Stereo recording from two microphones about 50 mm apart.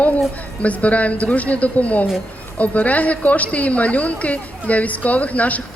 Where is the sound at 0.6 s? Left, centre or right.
Left.